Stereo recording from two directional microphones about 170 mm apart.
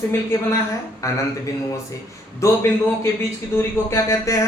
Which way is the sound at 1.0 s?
20° left (ahead or behind).